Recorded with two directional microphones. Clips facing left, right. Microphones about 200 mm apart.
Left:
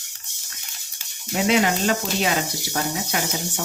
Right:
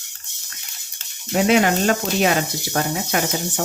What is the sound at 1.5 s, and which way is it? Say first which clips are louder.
Speech: right 2 dB; 50° right (ahead or behind).